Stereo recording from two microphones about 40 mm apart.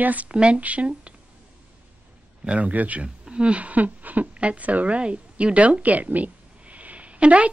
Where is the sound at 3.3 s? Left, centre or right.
Right.